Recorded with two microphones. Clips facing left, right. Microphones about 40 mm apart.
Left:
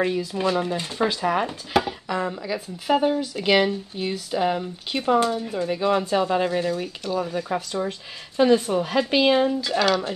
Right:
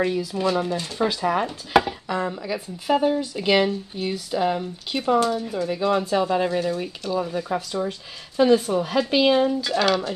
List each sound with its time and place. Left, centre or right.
0.0 s speech: centre
0.7 s speech: left
0.9 s speech: centre
1.7 s chopping: centre
3.0 s speech: centre
7.2 s chopping: centre
7.4 s speech: centre
9.6 s chopping: centre